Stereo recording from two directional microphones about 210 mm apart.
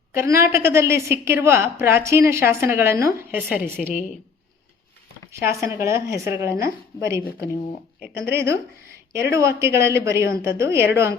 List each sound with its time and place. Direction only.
0.1 s a woman's voice: 10° right (ahead or behind)
5.3 s a woman's voice: 15° right (ahead or behind)
8.3 s a woman's voice: 10° right (ahead or behind)